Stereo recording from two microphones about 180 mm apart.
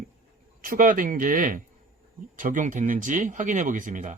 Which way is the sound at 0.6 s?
50° right (ahead or behind).